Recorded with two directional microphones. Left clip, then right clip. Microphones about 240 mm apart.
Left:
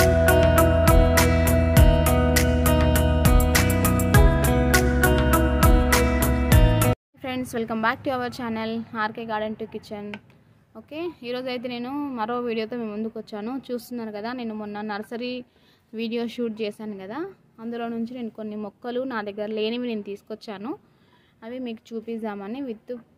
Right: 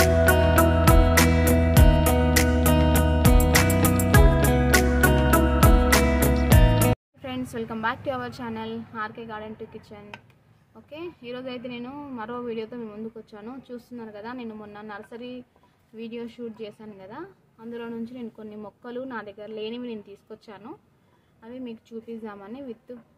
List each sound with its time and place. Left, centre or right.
0.0 s music: centre
7.2 s a woman's voice: left